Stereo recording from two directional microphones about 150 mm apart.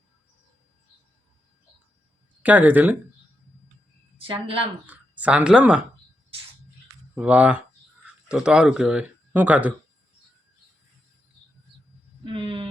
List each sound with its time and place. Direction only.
2.4 s speech: 10° right (ahead or behind)
4.9 s speech: 10° right (ahead or behind)
7.2 s speech: 10° right (ahead or behind)
12.2 s speech: 35° right (ahead or behind)